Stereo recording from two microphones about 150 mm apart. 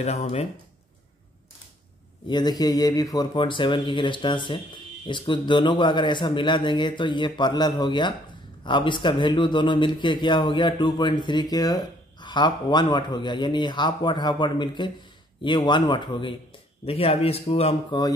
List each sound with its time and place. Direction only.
0.0 s speech: 45° left (ahead or behind)
2.2 s speech: 30° left (ahead or behind)